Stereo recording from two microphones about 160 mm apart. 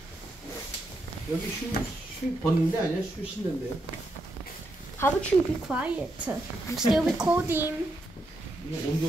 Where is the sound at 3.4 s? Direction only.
30° right (ahead or behind).